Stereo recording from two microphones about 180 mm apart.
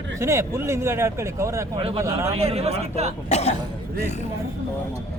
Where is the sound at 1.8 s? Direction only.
30° right (ahead or behind).